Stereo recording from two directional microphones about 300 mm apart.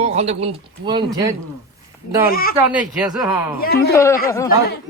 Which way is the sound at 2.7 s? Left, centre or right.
Centre.